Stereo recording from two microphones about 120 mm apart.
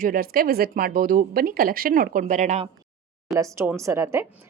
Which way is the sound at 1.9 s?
90° right.